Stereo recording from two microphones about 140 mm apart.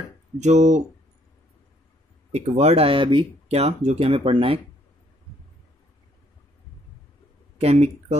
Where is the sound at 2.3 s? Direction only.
50° right (ahead or behind).